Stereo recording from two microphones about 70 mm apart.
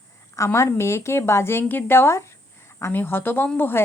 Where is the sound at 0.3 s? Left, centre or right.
Left.